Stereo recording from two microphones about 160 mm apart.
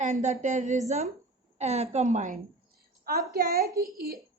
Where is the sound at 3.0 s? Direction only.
65° right (ahead or behind).